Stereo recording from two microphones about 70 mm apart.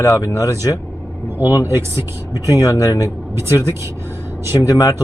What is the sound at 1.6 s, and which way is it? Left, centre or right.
Speech, right.